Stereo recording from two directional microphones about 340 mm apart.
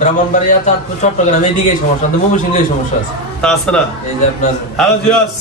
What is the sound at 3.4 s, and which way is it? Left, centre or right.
Speech, centre.